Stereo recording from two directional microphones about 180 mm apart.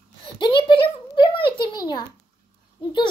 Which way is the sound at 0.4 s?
25° left (ahead or behind).